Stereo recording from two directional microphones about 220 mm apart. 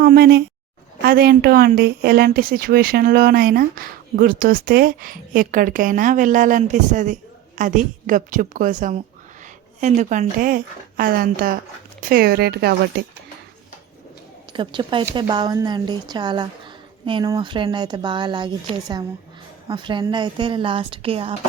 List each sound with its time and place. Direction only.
0.0 s a sound: 45° right (ahead or behind)
1.0 s a woman's voice: 45° right (ahead or behind)
14.5 s speech: 20° right (ahead or behind)